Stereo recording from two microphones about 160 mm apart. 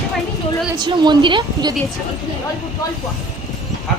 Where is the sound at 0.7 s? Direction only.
30° right (ahead or behind).